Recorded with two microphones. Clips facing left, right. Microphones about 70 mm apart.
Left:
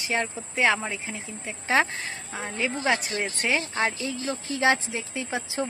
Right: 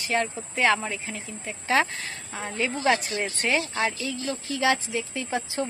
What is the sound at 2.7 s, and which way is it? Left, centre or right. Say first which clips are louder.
Speech: right 3 dB; left.